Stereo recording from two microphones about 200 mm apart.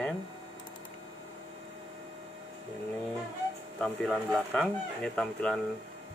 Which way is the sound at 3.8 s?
Centre (ahead or behind).